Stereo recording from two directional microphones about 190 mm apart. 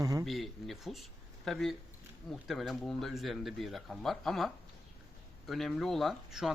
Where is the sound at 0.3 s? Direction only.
Centre (ahead or behind).